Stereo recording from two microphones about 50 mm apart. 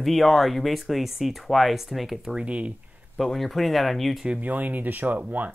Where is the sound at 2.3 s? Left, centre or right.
Right.